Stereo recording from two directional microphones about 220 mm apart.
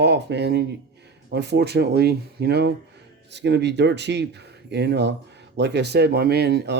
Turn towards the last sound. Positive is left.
turn(degrees=-45)  # may be behind; listen again after turning